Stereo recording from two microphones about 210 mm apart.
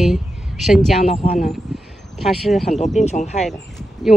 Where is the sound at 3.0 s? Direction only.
35° left (ahead or behind).